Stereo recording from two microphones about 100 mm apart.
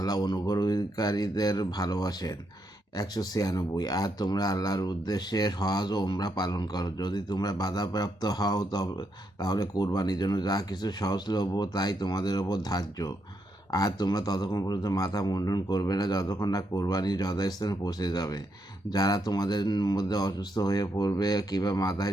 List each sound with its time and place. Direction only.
0.0 s speech: 45° left (ahead or behind)